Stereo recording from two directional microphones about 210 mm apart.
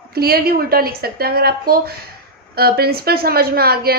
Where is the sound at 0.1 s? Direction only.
45° right (ahead or behind).